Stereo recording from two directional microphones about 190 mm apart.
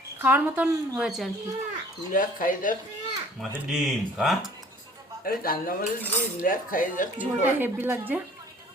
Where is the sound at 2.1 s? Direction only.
45° left (ahead or behind).